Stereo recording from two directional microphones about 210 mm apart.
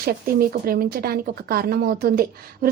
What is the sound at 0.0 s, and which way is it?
Speech, 45° right (ahead or behind).